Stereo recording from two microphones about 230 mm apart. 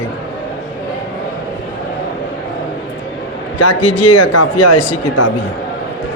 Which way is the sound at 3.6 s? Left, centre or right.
Left.